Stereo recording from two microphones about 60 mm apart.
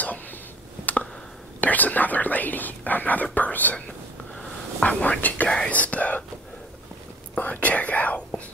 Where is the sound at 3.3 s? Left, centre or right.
Left.